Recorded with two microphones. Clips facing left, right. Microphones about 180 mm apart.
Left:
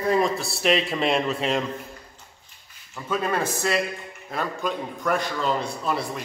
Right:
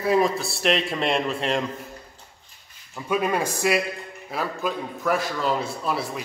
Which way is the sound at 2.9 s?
10° right (ahead or behind).